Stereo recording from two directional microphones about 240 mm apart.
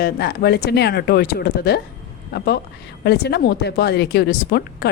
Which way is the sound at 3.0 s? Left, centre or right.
Left.